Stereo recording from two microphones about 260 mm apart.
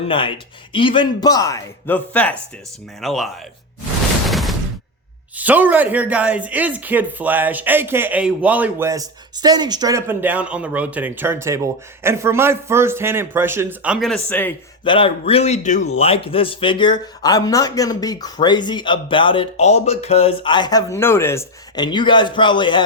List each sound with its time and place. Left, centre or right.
0.1 s a man's voice: centre
4.3 s a sound: centre
5.4 s speech: centre
14.8 s a man's voice: left